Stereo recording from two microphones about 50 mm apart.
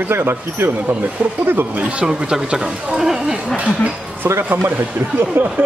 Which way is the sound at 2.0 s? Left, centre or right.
Centre.